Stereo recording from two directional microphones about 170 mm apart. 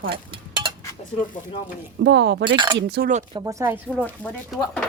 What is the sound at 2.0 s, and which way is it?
Speech, 90° right.